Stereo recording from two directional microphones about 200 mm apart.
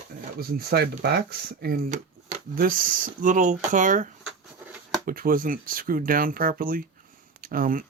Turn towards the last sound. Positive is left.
turn(degrees=-45)  # may be behind; listen again after turning